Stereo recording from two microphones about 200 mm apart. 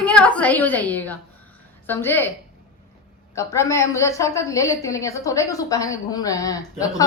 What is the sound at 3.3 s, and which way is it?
Speech, 15° left (ahead or behind).